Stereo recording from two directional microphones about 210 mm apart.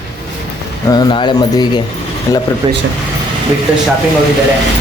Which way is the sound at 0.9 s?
20° left (ahead or behind).